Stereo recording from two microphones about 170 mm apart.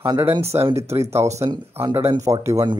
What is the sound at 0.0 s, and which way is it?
Speech, 15° right (ahead or behind).